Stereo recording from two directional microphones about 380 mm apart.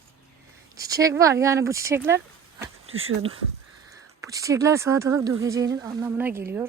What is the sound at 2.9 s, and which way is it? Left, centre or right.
Speech, right.